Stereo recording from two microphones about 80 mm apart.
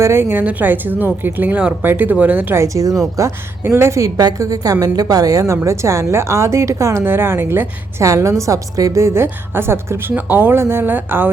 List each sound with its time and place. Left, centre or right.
0.0 s speech: right
2.6 s speech: right
3.6 s a woman's voice: right
4.2 s a woman's voice: right
8.0 s a woman's voice: right